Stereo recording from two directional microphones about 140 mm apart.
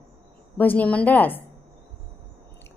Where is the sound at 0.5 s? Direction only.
10° left (ahead or behind).